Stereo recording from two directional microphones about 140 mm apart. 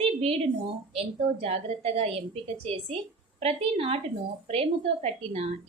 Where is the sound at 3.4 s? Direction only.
45° right (ahead or behind).